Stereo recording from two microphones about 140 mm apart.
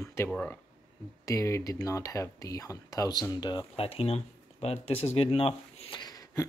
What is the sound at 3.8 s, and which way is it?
Speech, 45° left (ahead or behind).